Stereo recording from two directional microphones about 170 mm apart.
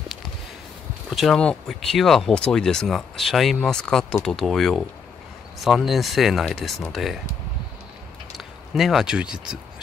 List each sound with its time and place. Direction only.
1.1 s speech: centre (ahead or behind)
8.7 s speech: centre (ahead or behind)